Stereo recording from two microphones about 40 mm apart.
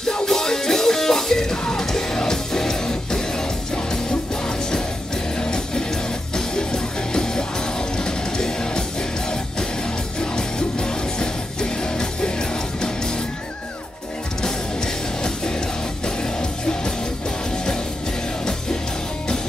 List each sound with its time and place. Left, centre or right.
0.1 s music: centre
10.3 s music: centre
14.4 s music: centre